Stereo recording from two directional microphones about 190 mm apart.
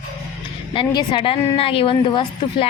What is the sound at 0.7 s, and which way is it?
A woman's voice, 25° left (ahead or behind).